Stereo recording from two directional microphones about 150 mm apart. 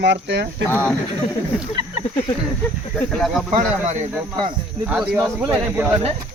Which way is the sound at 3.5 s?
50° right (ahead or behind).